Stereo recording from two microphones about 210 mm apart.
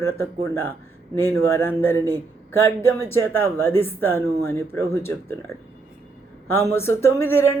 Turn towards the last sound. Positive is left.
turn(degrees=10)  # may be behind; listen again after turning